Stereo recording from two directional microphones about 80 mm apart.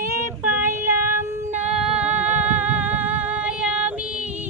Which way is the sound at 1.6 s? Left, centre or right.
Centre.